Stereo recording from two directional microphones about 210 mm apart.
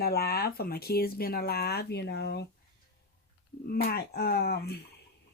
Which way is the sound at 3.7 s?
45° left (ahead or behind).